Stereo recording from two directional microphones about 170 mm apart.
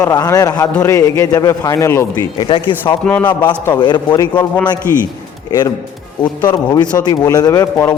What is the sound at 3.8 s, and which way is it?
Speech, 25° left (ahead or behind).